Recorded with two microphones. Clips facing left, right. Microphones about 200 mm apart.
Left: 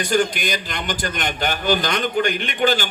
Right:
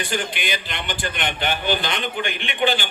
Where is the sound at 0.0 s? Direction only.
40° left (ahead or behind).